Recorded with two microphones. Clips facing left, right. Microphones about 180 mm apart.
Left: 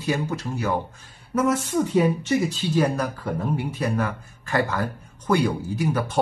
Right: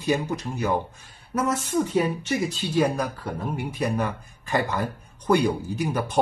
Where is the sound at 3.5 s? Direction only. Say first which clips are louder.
Right 2 dB; 15° right (ahead or behind).